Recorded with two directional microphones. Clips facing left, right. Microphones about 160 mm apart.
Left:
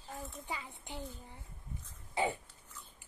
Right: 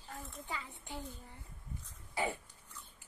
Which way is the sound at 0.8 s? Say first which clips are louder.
Left 1 dB; 20° left (ahead or behind).